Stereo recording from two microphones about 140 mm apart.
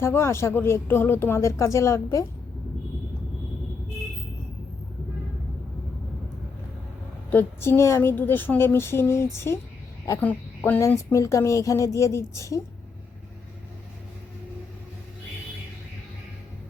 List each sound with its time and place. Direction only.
0.0 s a woman's voice: 20° left (ahead or behind)
7.3 s a woman's voice: 15° left (ahead or behind)